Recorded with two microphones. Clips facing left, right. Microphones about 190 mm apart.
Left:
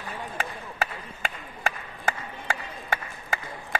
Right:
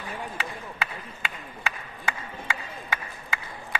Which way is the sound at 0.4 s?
45° left (ahead or behind).